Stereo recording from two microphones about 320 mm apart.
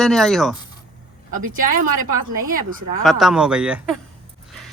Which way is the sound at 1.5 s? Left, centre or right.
Right.